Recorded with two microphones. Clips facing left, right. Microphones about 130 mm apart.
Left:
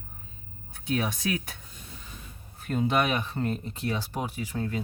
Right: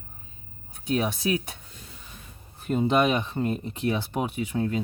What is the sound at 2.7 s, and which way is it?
Speech, 20° right (ahead or behind).